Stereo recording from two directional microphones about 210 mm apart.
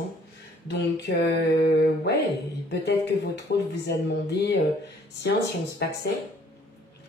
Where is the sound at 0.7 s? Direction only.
55° left (ahead or behind).